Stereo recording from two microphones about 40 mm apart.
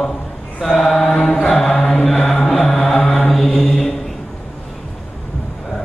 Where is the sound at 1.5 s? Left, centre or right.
Centre.